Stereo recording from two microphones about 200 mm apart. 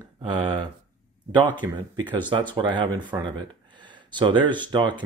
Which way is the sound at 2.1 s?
25° right (ahead or behind).